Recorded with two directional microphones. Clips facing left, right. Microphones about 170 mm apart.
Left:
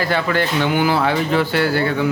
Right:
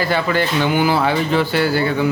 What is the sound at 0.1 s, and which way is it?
Speech, 5° right (ahead or behind).